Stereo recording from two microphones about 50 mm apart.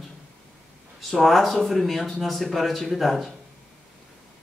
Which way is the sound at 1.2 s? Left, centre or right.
Centre.